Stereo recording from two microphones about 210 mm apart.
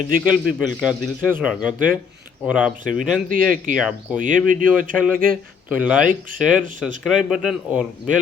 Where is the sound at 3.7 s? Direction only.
5° right (ahead or behind).